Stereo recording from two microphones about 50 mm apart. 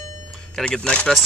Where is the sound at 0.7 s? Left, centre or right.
Left.